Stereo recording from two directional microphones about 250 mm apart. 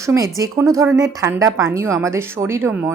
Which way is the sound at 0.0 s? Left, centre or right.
Centre.